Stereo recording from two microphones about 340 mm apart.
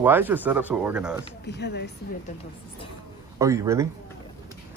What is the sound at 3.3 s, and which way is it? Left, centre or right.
Speech, centre.